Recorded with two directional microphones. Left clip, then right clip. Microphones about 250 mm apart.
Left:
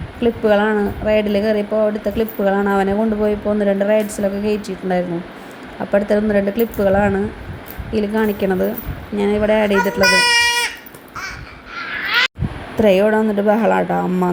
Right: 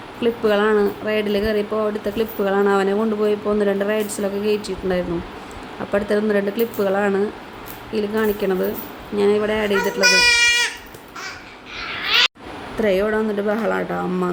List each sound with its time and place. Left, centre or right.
0.2 s speech: centre
10.0 s a sound: centre
12.7 s speech: centre